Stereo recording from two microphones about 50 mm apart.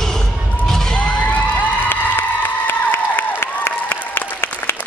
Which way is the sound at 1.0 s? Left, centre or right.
Left.